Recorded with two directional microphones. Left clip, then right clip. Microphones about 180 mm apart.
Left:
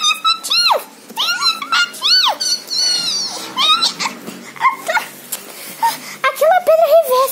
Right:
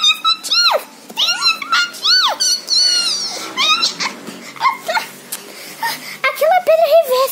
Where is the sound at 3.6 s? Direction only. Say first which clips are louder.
Left 1 dB; centre (ahead or behind).